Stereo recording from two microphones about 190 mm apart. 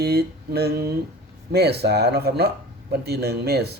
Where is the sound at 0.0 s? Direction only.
55° right (ahead or behind).